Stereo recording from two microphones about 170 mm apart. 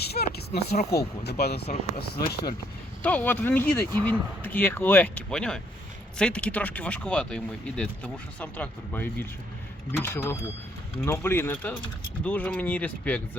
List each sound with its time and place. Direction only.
0.0 s a sound: 70° left (ahead or behind)
0.9 s speech: 75° left (ahead or behind)
3.0 s speech: 10° left (ahead or behind)